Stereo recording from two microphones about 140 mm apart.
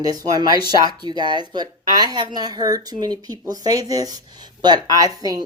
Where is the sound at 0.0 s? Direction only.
25° right (ahead or behind).